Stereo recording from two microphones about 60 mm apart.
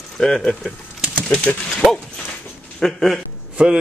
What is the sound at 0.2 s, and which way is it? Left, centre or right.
Speech, centre.